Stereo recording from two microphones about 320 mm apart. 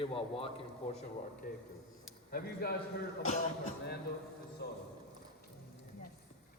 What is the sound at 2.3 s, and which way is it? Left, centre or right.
Speech, left.